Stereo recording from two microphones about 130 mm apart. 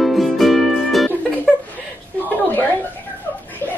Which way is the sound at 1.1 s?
15° left (ahead or behind).